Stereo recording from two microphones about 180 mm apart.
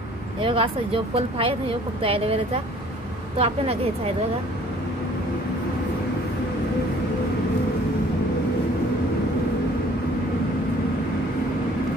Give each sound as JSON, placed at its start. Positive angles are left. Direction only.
{"t": 0.4, "sound": "a woman's voice", "side_deg": -30}